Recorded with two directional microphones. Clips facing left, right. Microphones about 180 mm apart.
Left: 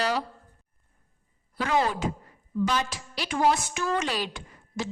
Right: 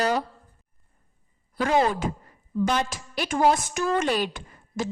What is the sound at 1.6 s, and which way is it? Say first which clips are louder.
Speech: right 3 dB; 45° right (ahead or behind).